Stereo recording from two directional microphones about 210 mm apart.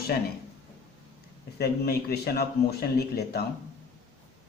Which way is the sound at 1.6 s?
50° left (ahead or behind).